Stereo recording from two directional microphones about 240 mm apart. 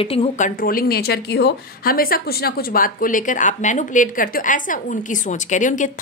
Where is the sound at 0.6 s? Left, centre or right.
Left.